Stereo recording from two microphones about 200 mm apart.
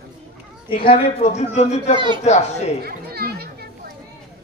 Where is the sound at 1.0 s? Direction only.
35° left (ahead or behind).